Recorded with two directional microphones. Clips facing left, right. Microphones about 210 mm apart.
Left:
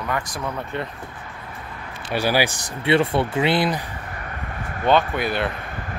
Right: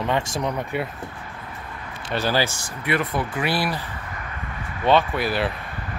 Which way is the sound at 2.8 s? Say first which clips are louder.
Left 5 dB; 30° left (ahead or behind).